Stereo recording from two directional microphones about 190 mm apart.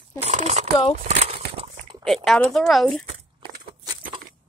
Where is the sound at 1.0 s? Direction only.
35° right (ahead or behind).